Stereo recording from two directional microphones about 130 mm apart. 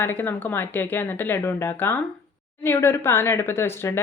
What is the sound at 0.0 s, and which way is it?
Speech, 15° left (ahead or behind).